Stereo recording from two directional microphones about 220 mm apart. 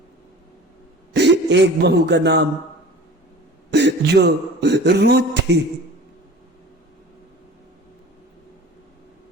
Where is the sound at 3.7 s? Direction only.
50° right (ahead or behind).